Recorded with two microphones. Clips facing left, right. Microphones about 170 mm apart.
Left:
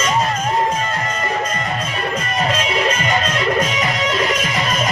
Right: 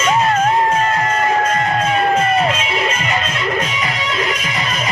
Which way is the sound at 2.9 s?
40° left (ahead or behind).